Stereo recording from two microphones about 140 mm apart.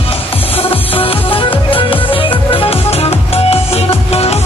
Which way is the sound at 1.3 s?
40° left (ahead or behind).